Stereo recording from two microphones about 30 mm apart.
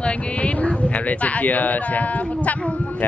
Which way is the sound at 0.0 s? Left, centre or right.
Left.